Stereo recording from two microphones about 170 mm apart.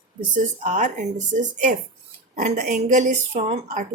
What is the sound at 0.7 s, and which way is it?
A woman's voice, 45° right (ahead or behind).